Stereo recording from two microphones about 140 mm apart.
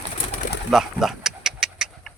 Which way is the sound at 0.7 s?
Centre (ahead or behind).